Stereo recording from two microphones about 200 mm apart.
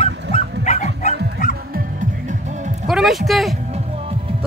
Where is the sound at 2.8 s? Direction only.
Centre (ahead or behind).